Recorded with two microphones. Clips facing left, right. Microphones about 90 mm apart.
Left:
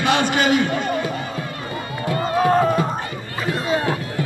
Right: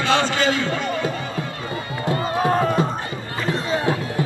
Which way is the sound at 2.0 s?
25° right (ahead or behind).